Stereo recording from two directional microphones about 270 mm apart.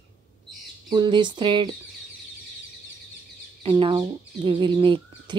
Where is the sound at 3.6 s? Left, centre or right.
Centre.